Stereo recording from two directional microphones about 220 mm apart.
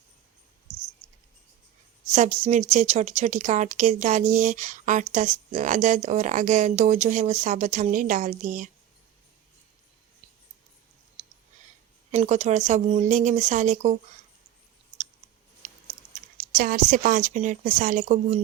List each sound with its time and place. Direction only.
2.1 s speech: 35° right (ahead or behind)
12.1 s speech: 30° right (ahead or behind)
15.6 s chewing: 30° right (ahead or behind)
16.5 s speech: 40° right (ahead or behind)